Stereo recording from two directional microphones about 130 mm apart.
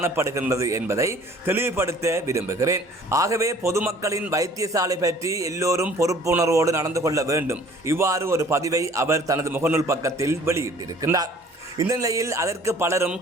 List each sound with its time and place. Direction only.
0.0 s a man's voice: 20° right (ahead or behind)